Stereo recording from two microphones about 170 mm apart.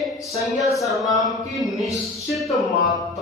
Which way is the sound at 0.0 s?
Centre (ahead or behind).